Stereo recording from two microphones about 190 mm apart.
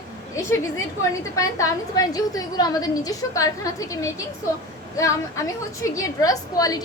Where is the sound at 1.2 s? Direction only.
15° left (ahead or behind).